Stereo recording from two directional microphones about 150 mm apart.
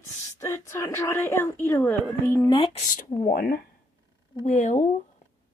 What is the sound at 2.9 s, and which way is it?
Speech, 60° left (ahead or behind).